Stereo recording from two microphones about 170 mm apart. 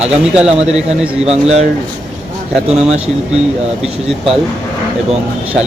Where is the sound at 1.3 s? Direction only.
40° right (ahead or behind).